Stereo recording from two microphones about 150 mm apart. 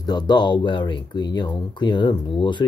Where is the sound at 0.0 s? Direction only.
30° left (ahead or behind).